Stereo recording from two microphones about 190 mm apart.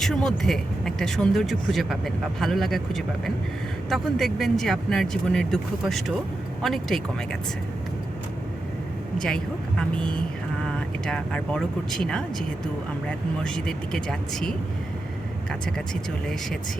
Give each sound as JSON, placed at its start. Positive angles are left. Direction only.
{"t": 0.0, "sound": "speech", "side_deg": 0}
{"t": 9.1, "sound": "speech", "side_deg": 5}